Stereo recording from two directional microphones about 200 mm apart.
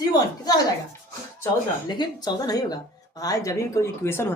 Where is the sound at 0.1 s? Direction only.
20° left (ahead or behind).